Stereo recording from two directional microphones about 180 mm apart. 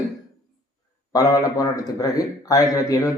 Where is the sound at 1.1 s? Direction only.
20° left (ahead or behind).